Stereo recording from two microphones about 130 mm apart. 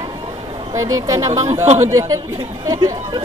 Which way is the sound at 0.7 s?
25° right (ahead or behind).